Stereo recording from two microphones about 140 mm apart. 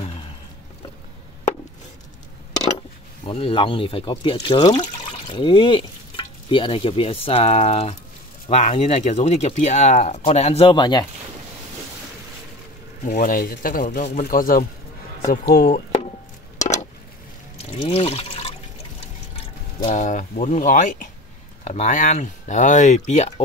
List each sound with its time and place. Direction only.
3.3 s speech: 40° left (ahead or behind)
5.3 s stir: 35° left (ahead or behind)
8.5 s speech: 50° left (ahead or behind); by 11.1 s 30° left (ahead or behind)
13.0 s speech: 80° left
16.5 s a sound: 55° left (ahead or behind)
17.6 s water: 45° left (ahead or behind)
19.8 s speech: 55° left (ahead or behind)
21.6 s speech: 55° left (ahead or behind)